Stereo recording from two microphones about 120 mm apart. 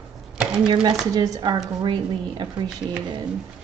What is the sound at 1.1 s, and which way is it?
Speech, 30° right (ahead or behind).